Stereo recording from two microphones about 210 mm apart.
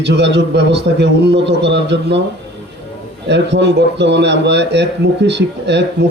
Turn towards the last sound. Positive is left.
turn(degrees=-55)  # may be behind; listen again after turning